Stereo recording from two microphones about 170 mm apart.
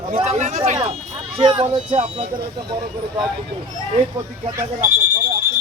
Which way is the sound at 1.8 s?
40° right (ahead or behind).